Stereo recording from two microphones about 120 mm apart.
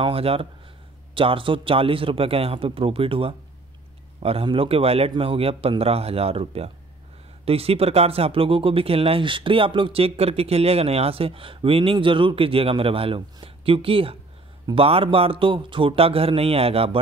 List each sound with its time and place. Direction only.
0.0 s a man's voice: 55° right (ahead or behind)